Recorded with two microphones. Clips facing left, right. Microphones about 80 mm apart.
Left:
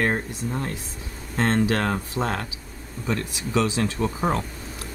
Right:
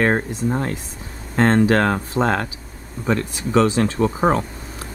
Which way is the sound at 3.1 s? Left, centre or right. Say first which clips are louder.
Right 6 dB; right.